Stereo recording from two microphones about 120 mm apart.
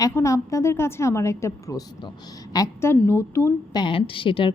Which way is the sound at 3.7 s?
40° left (ahead or behind).